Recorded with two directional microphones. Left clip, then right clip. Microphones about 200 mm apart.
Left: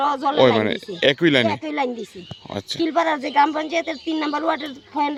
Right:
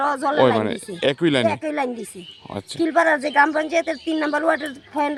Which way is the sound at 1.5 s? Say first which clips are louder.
Even; 15° right (ahead or behind).